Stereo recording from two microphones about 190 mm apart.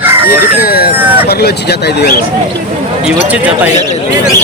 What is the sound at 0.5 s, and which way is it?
Speech, 50° left (ahead or behind).